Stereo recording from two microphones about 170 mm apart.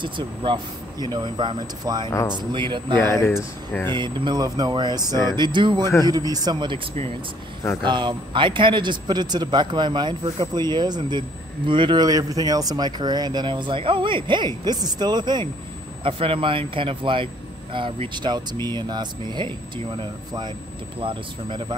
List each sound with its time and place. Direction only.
0.0 s speech: 30° right (ahead or behind)
2.0 s speech: 20° left (ahead or behind)
2.3 s speech: 30° right (ahead or behind)
3.0 s speech: 15° left (ahead or behind)
3.9 s speech: 25° right (ahead or behind)